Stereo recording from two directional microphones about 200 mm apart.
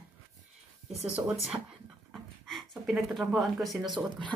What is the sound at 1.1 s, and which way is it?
Speech, 5° right (ahead or behind).